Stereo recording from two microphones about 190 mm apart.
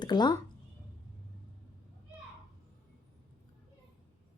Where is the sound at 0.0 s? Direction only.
20° left (ahead or behind).